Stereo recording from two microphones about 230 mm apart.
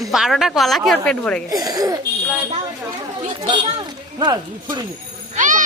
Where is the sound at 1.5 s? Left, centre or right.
Centre.